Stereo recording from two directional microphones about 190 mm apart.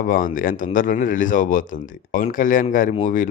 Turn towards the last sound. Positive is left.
turn(degrees=40)  # may be behind; listen again after turning